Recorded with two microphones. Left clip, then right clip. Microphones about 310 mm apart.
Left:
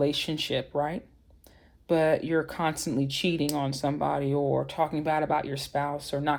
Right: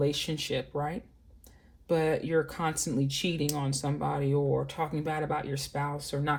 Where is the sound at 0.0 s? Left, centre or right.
Left.